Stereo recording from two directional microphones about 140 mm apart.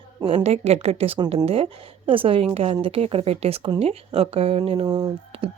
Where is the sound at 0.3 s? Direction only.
45° right (ahead or behind).